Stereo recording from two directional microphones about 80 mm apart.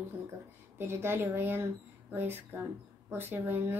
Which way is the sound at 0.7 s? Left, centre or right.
Right.